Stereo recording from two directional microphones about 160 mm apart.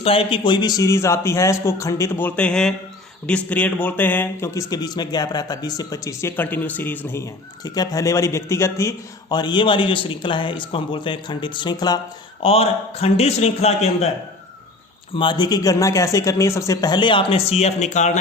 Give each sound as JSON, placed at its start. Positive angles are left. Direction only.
{"t": 0.0, "sound": "a man's voice", "side_deg": 35}
{"t": 12.4, "sound": "a man's voice", "side_deg": 40}
{"t": 15.1, "sound": "speech", "side_deg": 30}